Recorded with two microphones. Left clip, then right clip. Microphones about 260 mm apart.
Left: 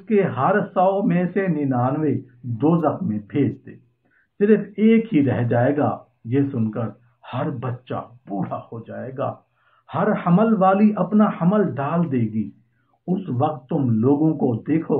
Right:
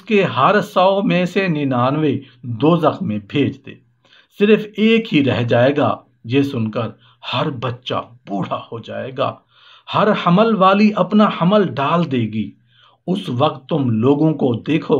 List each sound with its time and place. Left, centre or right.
0.0 s speech: right